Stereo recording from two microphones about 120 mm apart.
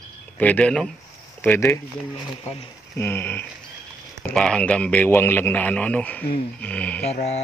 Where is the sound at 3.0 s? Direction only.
15° left (ahead or behind).